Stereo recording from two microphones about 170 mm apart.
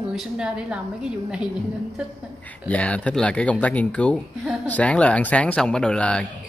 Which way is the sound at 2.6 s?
5° left (ahead or behind).